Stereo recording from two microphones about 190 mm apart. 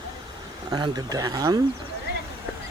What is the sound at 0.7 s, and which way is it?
Speech, 20° right (ahead or behind).